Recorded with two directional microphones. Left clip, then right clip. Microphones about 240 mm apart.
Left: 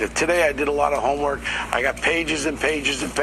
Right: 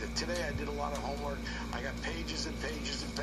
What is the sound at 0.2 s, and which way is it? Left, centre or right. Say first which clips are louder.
A man's voice: left 18 dB; left.